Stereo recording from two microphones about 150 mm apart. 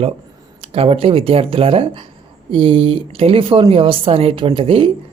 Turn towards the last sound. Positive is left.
turn(degrees=-35)  # may be behind; listen again after turning